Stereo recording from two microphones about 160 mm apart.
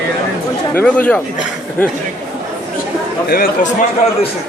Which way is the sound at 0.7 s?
10° left (ahead or behind).